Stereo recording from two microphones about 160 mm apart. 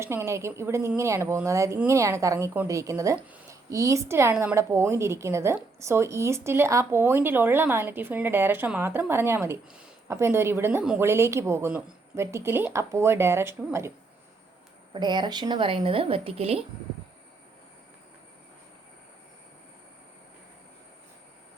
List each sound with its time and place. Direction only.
0.0 s a woman's voice: 15° right (ahead or behind)
14.9 s speech: 30° right (ahead or behind)